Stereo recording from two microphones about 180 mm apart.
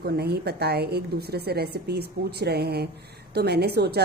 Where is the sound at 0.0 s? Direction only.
65° right (ahead or behind).